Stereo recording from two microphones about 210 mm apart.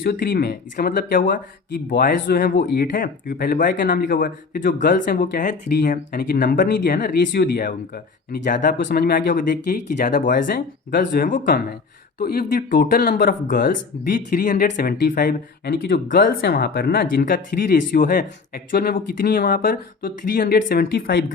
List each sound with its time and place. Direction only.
0.0 s speech: 45° left (ahead or behind)